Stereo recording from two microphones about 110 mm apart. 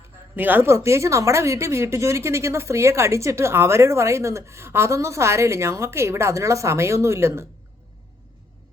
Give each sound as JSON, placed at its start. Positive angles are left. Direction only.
{"t": 0.3, "sound": "speech", "side_deg": -15}